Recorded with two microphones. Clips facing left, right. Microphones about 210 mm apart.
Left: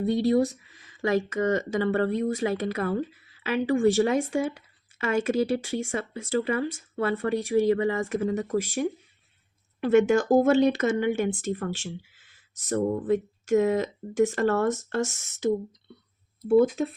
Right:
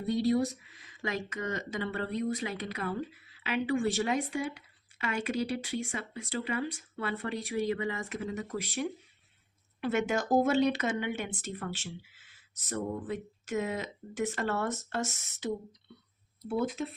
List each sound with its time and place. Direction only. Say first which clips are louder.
1.0 s speech: left 11 dB; 45° left (ahead or behind)